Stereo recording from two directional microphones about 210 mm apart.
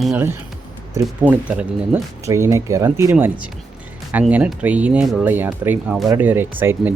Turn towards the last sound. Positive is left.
turn(degrees=-10)  # may be behind; listen again after turning